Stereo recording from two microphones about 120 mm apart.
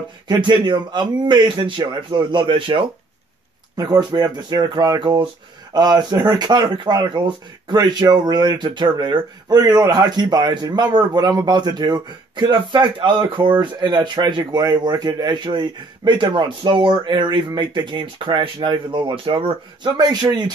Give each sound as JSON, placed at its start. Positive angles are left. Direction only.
{"t": 0.3, "sound": "speech", "side_deg": -40}
{"t": 3.7, "sound": "speech", "side_deg": -35}